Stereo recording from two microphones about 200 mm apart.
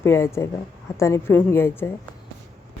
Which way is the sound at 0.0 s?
10° left (ahead or behind).